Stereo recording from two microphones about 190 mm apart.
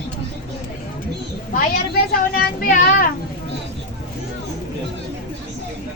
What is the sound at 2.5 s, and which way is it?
Child singing, 50° left (ahead or behind).